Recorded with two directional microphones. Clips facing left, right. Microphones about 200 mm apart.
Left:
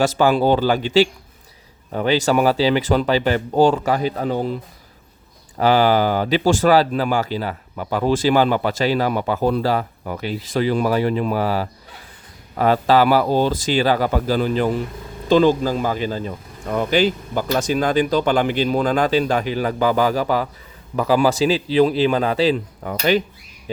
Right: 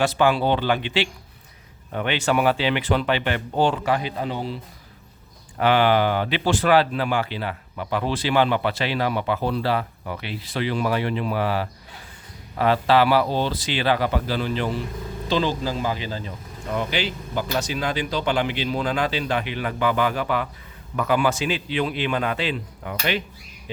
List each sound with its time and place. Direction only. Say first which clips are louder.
0.0 s speech: left 4 dB; 40° left (ahead or behind)
5.5 s speech: left 3 dB; 40° left (ahead or behind)